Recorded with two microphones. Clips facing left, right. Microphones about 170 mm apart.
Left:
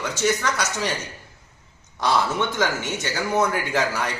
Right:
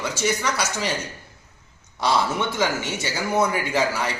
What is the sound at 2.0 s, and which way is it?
A man's voice, 15° right (ahead or behind).